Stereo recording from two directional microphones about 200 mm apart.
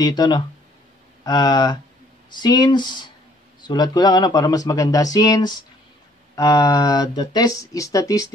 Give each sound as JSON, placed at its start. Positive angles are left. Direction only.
{"t": 0.0, "sound": "speech", "side_deg": 20}